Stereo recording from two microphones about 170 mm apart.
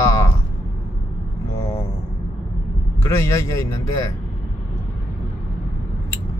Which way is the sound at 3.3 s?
15° left (ahead or behind).